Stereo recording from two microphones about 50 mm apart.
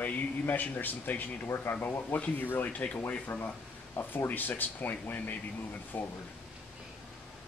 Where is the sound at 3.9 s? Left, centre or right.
Left.